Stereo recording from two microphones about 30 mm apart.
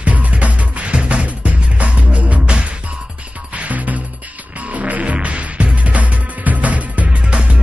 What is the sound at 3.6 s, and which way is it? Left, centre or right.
Music, right.